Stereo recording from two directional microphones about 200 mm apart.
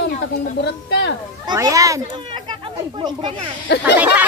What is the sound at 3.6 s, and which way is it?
Speech, 60° left (ahead or behind).